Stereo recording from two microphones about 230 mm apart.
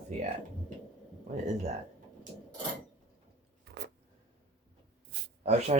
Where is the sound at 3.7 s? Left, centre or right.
Right.